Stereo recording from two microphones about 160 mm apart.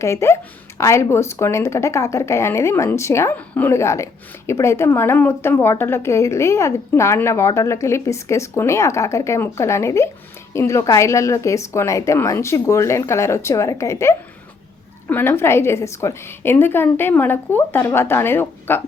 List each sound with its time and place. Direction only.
0.0 s speech: 20° left (ahead or behind)